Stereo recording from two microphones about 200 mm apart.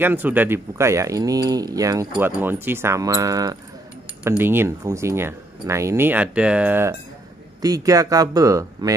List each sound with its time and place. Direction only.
0.0 s speech: 10° right (ahead or behind)